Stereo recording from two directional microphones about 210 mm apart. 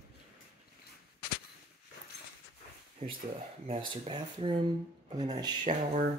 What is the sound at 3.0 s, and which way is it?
Speech, 30° right (ahead or behind).